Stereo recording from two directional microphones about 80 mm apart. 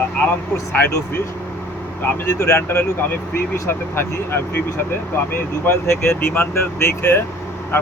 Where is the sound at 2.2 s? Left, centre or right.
Left.